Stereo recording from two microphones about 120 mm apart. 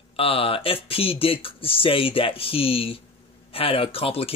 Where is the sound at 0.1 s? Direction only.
50° left (ahead or behind).